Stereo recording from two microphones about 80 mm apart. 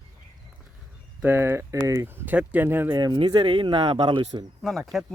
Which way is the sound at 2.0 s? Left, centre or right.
Right.